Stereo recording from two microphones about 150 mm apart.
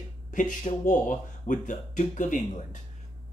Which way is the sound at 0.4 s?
55° left (ahead or behind).